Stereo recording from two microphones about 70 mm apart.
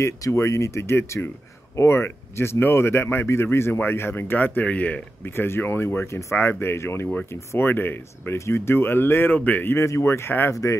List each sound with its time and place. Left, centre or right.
0.0 s speech: left
5.3 s speech: left
9.8 s speech: left
10.5 s speech: left